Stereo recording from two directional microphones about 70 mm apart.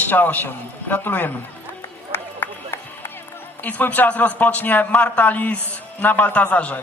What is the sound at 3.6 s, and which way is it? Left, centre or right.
A man's voice, left.